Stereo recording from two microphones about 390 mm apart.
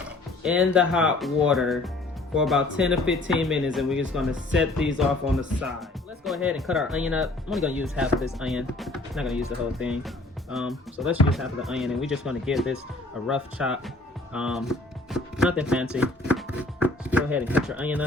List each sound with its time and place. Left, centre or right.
0.0 s speech: centre
14.3 s chopping: centre